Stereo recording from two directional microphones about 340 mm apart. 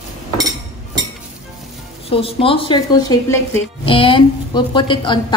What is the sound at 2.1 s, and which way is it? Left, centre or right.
Speech, centre.